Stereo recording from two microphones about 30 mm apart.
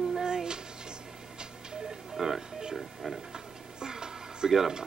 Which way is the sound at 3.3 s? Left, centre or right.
Right.